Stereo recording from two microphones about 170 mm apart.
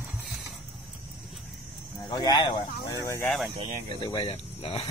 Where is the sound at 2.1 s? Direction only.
25° left (ahead or behind).